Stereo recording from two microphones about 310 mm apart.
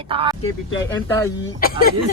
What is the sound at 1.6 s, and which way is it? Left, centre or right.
Speech, left.